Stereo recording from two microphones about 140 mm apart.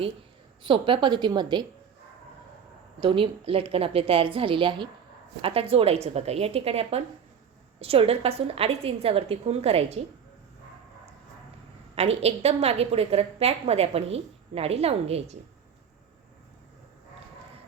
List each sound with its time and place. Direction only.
0.6 s a woman's voice: 35° right (ahead or behind)
3.0 s a woman's voice: 40° right (ahead or behind)
11.9 s a woman's voice: 45° right (ahead or behind)